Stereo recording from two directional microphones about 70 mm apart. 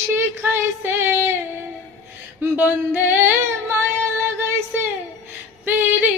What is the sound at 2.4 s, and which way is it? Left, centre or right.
Female singing, right.